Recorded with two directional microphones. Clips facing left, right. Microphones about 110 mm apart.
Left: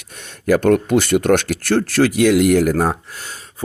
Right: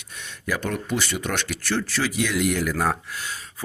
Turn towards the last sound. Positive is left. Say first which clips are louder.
# even
turn(degrees=35)  # may be behind; listen again after turning